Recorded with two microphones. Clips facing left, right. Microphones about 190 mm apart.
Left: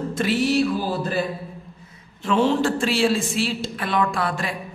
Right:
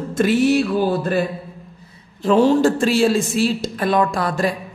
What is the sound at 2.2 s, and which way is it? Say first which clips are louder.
A woman's voice: right 6 dB; 40° right (ahead or behind).